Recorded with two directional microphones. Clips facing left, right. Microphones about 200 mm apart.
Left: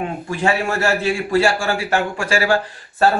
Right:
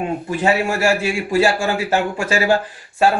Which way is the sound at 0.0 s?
20° right (ahead or behind).